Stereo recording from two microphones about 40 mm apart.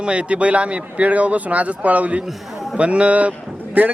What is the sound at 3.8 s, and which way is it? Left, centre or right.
Speech, right.